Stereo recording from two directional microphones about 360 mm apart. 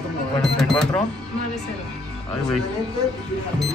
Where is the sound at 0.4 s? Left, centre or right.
Centre.